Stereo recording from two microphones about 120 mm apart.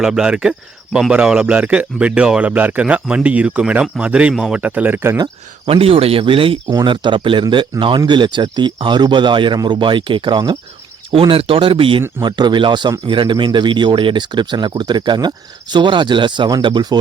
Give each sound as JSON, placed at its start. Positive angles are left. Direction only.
{"t": 0.0, "sound": "a man's voice", "side_deg": -5}
{"t": 5.6, "sound": "speech", "side_deg": -55}
{"t": 6.7, "sound": "speech", "side_deg": -40}
{"t": 11.1, "sound": "speech", "side_deg": -50}